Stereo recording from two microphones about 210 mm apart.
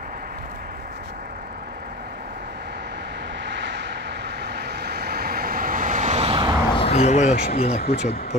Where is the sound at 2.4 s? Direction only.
55° right (ahead or behind); by 6.5 s 25° right (ahead or behind).